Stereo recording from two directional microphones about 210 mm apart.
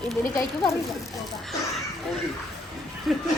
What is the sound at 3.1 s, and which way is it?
Speech, centre (ahead or behind).